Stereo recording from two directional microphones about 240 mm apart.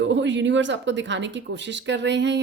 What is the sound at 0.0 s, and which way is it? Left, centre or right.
Speech, right.